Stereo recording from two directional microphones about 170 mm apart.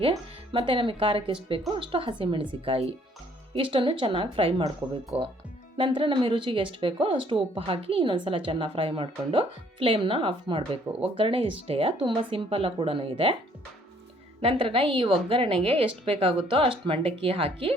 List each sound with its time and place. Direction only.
0.1 s speech: 30° right (ahead or behind)
14.4 s speech: 35° right (ahead or behind)